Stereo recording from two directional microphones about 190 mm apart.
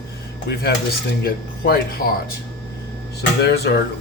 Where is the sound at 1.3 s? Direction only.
55° left (ahead or behind).